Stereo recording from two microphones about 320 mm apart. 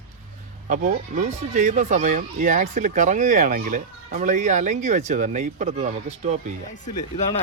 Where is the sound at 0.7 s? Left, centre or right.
Right.